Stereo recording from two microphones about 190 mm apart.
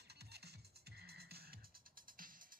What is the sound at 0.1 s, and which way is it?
Music, 60° right (ahead or behind).